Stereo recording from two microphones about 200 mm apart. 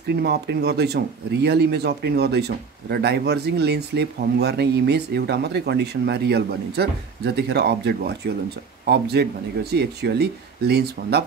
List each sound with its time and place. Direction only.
0.1 s speech: 55° right (ahead or behind)